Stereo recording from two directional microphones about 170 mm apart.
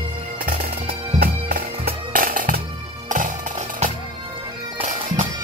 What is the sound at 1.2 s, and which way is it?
Music, 60° right (ahead or behind).